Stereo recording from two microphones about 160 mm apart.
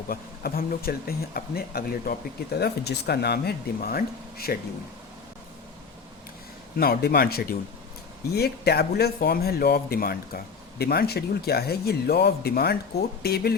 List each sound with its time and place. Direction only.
0.1 s speech: 65° left (ahead or behind)
6.7 s a man's voice: 70° left (ahead or behind)